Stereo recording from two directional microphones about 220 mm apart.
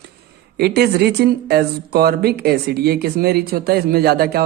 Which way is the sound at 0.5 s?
45° right (ahead or behind).